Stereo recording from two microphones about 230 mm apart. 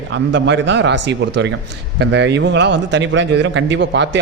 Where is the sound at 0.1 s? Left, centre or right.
Right.